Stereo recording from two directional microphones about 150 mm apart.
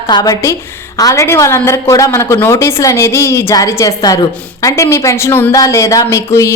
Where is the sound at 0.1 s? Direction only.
25° left (ahead or behind).